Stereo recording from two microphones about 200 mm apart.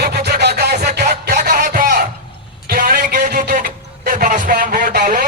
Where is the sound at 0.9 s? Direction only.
55° right (ahead or behind).